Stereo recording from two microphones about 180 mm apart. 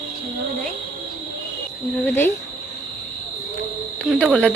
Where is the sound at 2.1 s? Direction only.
10° left (ahead or behind).